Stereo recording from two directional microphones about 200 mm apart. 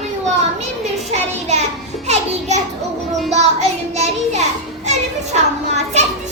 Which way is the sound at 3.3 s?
35° right (ahead or behind).